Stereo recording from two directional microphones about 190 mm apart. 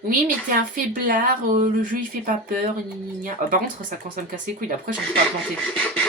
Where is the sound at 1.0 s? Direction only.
45° right (ahead or behind).